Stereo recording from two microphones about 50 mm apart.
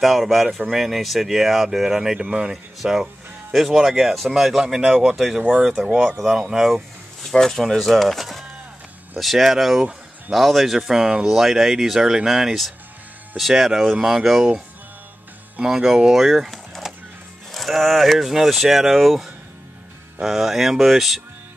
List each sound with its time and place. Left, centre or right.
0.0 s speech: centre
2.1 s speech: right
2.5 s speech: centre
7.2 s speech: centre
15.6 s speech: centre
16.8 s music: centre
17.5 s speech: centre